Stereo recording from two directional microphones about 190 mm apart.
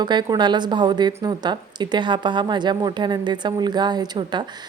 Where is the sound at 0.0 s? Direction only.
20° right (ahead or behind).